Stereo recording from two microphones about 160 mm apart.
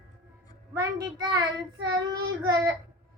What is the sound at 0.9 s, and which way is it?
A child's voice, 25° right (ahead or behind).